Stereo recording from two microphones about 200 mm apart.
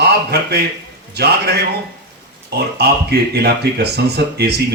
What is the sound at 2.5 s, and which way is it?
Speech, 50° right (ahead or behind).